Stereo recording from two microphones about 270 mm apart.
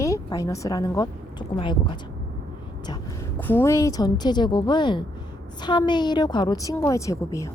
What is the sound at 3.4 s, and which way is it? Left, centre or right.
A woman's voice, centre.